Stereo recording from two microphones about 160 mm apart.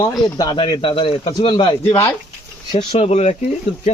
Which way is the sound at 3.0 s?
45° left (ahead or behind).